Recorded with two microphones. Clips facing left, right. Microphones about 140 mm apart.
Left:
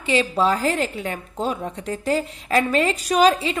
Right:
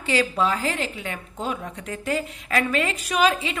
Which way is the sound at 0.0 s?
25° left (ahead or behind).